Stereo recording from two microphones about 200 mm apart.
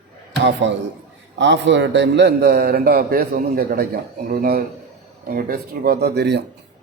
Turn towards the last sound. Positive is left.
turn(degrees=-60)  # may be behind; listen again after turning